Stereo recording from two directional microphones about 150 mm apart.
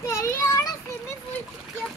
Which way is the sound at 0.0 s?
20° left (ahead or behind).